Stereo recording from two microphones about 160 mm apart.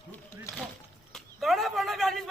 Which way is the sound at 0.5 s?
20° left (ahead or behind).